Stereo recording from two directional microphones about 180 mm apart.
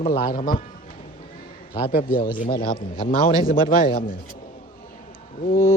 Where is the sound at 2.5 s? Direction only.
55° left (ahead or behind).